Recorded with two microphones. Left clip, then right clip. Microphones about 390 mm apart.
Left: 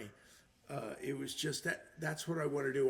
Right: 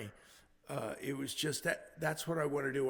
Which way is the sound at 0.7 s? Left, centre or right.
Right.